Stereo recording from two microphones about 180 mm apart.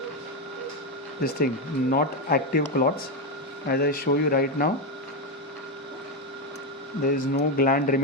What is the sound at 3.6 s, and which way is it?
Speech, 60° left (ahead or behind).